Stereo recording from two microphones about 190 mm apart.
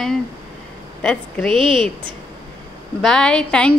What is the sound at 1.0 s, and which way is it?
Speech, centre (ahead or behind).